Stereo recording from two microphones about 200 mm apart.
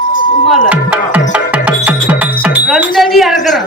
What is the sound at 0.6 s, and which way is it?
Music, 5° right (ahead or behind).